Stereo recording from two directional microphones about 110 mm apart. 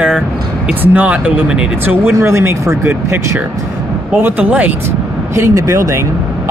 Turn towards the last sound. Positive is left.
turn(degrees=-25)  # may be behind; listen again after turning